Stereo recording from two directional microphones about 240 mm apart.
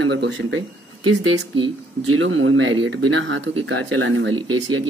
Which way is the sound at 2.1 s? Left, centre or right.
Right.